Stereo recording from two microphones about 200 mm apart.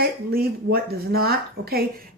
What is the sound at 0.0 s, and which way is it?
A woman's voice, 50° right (ahead or behind).